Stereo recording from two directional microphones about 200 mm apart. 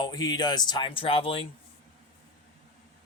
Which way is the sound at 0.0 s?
20° left (ahead or behind).